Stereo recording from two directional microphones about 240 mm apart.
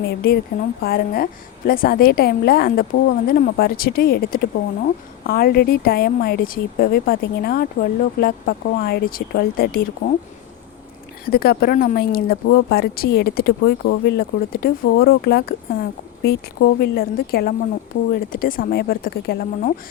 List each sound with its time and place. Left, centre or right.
0.0 s a woman's voice: left
11.3 s a woman's voice: left